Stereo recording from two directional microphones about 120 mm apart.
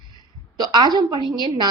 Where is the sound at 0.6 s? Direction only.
30° right (ahead or behind).